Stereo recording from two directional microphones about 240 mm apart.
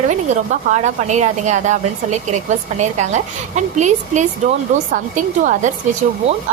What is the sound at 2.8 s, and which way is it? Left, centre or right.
A woman's voice, right.